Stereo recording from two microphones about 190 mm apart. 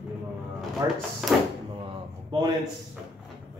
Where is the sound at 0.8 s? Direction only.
20° right (ahead or behind).